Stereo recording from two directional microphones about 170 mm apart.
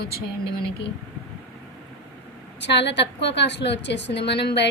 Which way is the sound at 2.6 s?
90° left.